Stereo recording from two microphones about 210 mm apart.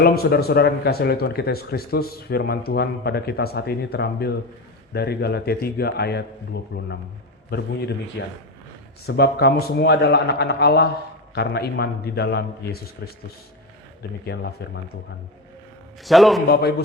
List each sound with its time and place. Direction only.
0.0 s speech: 45° left (ahead or behind)
16.0 s a man's voice: centre (ahead or behind)
16.5 s speech: 50° left (ahead or behind)